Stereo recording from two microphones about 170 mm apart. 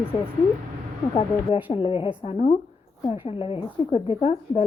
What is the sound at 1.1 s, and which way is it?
A woman's voice, 35° left (ahead or behind).